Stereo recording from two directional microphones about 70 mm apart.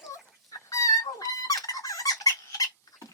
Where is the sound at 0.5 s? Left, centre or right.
Left.